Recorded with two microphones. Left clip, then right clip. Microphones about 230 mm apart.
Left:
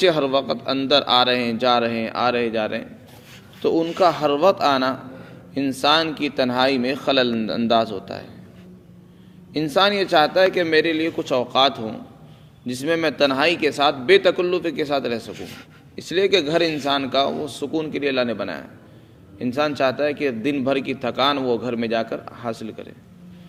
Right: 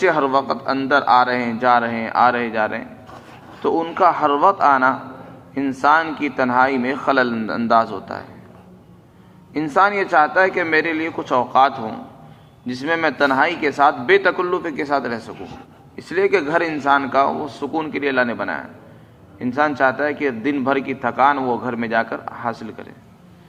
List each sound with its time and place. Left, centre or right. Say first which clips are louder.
0.0 s a man's voice: right 2 dB; left
10.1 s a man's voice: right 1 dB; left
14.8 s speech: right 2 dB; left
16.3 s a man's voice: right 1 dB; left